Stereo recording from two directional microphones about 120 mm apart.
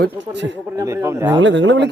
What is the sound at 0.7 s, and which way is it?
Speech, 25° right (ahead or behind).